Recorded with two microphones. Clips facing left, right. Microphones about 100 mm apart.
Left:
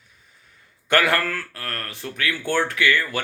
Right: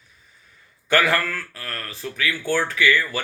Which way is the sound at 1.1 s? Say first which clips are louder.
Even; 55° left (ahead or behind).